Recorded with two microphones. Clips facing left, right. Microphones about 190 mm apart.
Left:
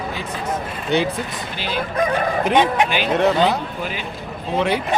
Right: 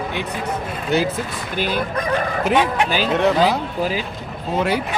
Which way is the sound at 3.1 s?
Centre (ahead or behind).